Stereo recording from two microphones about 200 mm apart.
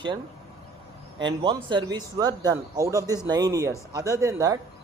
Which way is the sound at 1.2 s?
25° right (ahead or behind).